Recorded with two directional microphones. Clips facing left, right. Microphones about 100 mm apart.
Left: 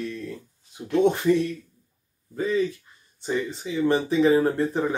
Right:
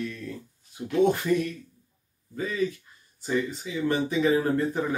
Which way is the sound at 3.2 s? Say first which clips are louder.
Even; 25° left (ahead or behind).